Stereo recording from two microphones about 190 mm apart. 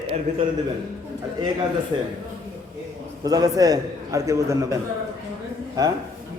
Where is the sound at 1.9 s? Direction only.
25° right (ahead or behind).